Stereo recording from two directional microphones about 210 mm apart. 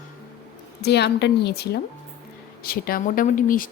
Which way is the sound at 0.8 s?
55° left (ahead or behind).